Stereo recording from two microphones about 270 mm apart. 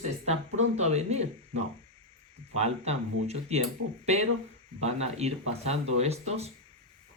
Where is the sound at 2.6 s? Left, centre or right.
Right.